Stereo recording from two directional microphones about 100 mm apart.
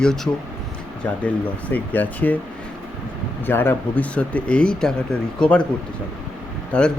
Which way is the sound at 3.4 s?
20° left (ahead or behind).